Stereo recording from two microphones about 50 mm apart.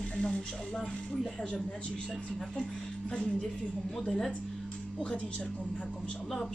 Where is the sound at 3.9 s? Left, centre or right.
Centre.